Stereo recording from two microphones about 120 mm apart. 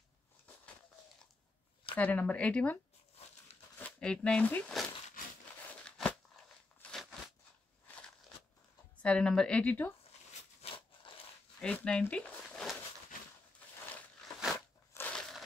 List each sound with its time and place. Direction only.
2.0 s a woman's voice: 10° left (ahead or behind)
5.7 s crunch: 10° left (ahead or behind)
6.0 s a sound: 5° left (ahead or behind)
9.0 s a woman's voice: 10° left (ahead or behind)
10.6 s a sound: 55° left (ahead or behind)
11.6 s speech: 10° left (ahead or behind)
13.6 s a sound: 10° left (ahead or behind)
14.2 s crunch: centre (ahead or behind)
14.9 s crushing: 20° left (ahead or behind)